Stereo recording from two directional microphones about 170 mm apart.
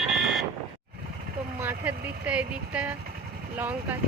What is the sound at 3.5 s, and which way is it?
Vehicle, 10° right (ahead or behind).